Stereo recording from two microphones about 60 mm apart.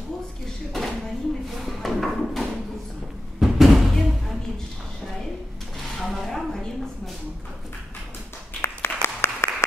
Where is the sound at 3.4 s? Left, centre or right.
Centre.